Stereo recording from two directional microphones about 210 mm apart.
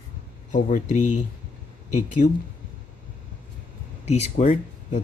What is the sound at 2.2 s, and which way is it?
Speech, 35° left (ahead or behind).